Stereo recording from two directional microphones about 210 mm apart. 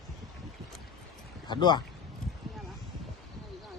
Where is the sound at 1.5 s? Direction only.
20° left (ahead or behind).